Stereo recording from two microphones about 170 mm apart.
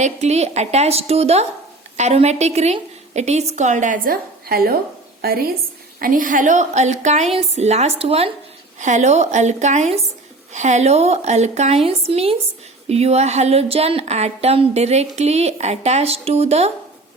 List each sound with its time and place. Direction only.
0.0 s a woman's voice: 40° right (ahead or behind)